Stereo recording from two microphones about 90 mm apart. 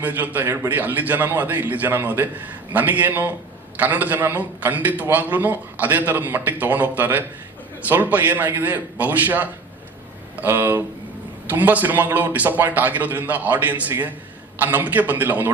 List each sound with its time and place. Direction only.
0.0 s a man's voice: 20° right (ahead or behind)